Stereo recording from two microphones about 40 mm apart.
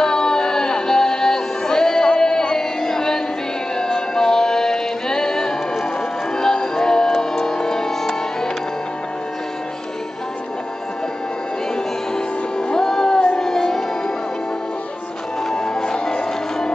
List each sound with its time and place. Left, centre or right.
0.0 s music: centre
12.5 s music: centre
15.5 s music: centre